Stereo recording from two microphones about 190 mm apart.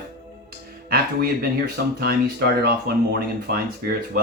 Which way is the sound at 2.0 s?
55° right (ahead or behind).